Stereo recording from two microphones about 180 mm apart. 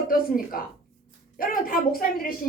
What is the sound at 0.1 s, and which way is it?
A woman's voice, 50° left (ahead or behind).